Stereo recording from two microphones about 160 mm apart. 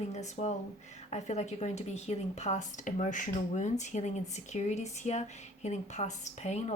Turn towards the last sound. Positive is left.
turn(degrees=45)  # may be behind; listen again after turning